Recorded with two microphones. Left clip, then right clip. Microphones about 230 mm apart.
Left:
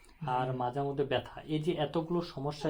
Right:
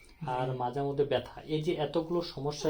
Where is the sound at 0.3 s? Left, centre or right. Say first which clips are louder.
Even; left.